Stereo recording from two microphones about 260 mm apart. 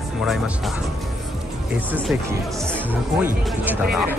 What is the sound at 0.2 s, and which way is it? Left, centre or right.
Speech, centre.